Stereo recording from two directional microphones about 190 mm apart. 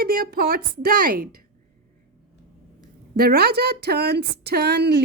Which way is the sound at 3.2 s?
55° right (ahead or behind).